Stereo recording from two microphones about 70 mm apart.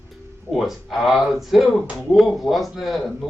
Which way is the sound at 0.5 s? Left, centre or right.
Centre.